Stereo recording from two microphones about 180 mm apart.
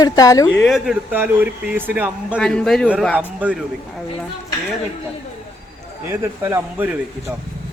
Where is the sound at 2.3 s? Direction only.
5° left (ahead or behind).